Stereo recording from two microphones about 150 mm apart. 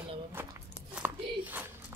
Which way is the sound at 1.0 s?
5° right (ahead or behind).